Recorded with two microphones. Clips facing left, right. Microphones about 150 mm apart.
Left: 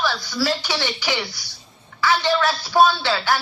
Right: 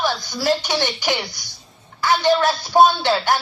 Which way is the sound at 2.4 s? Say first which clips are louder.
Even; 20° right (ahead or behind).